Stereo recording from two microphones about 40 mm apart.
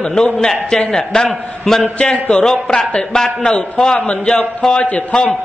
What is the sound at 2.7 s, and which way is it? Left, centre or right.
A man's voice, centre.